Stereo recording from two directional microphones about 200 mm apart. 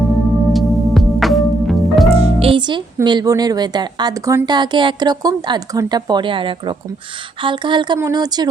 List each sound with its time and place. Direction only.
0.5 s music: centre (ahead or behind)
2.1 s speech: 30° right (ahead or behind)